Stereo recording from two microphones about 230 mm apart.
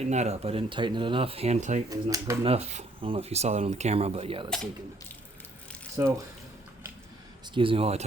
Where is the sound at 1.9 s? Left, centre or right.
Centre.